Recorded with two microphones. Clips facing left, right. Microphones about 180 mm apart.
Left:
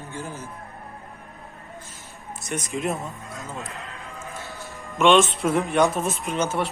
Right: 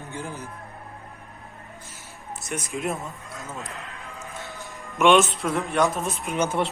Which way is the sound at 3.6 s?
20° right (ahead or behind).